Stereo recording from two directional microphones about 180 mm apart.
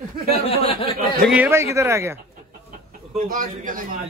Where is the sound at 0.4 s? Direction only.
30° left (ahead or behind).